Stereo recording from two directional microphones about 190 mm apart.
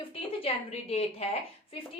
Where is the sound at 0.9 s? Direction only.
30° left (ahead or behind).